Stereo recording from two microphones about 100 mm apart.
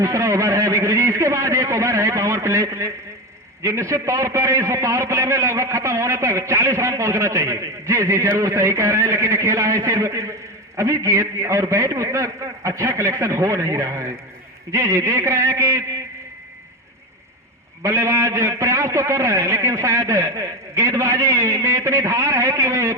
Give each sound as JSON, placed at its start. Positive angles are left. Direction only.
{"t": 0.0, "sound": "a man's voice", "side_deg": -30}
{"t": 17.8, "sound": "a man's voice", "side_deg": -30}